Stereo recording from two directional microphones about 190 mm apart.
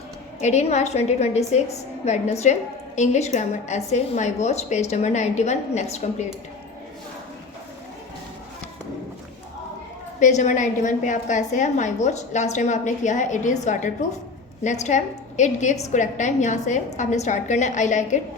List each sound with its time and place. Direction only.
0.4 s a woman's voice: 35° left (ahead or behind)
10.2 s a woman's voice: 40° left (ahead or behind)